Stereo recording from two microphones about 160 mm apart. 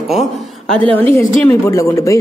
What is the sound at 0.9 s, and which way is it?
A woman's voice, 15° left (ahead or behind).